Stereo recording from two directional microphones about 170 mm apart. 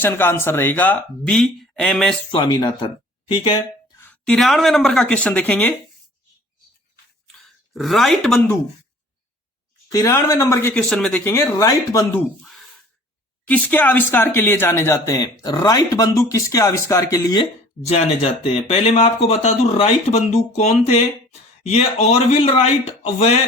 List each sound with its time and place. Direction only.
0.0 s speech: 15° left (ahead or behind)
2.3 s speech: 25° left (ahead or behind)
3.9 s speech: 10° left (ahead or behind)
7.7 s speech: centre (ahead or behind)
9.9 s speech: 20° left (ahead or behind)
10.8 s speech: 5° left (ahead or behind); by 12.2 s 20° left (ahead or behind)
12.4 s a sound: centre (ahead or behind)
13.5 s speech: 10° left (ahead or behind)
17.8 s speech: 35° left (ahead or behind)